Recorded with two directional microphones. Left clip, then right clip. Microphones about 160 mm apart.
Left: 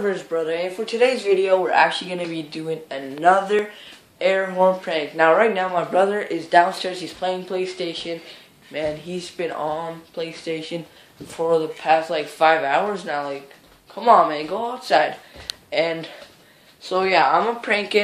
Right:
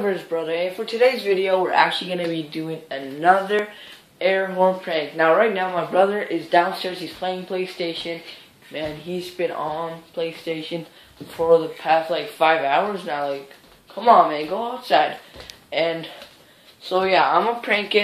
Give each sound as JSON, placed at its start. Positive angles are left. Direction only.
{"t": 0.0, "sound": "speech", "side_deg": 5}